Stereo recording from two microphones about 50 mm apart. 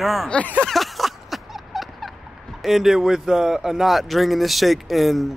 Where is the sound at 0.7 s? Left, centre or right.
Centre.